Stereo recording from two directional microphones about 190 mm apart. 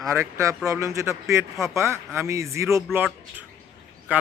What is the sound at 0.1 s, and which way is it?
A man's voice, 15° right (ahead or behind).